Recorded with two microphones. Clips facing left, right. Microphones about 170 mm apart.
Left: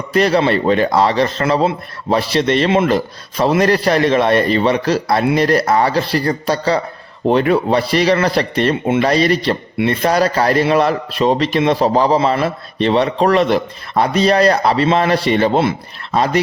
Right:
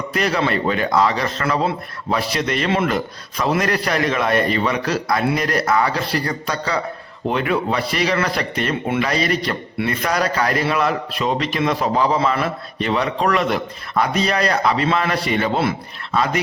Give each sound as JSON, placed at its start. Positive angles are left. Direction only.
{"t": 0.1, "sound": "a man's voice", "side_deg": 30}